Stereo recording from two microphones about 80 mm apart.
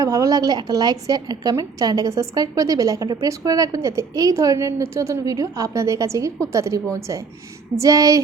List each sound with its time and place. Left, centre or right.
0.0 s a woman's voice: right